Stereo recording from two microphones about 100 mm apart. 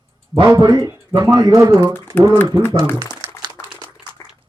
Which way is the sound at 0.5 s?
40° right (ahead or behind).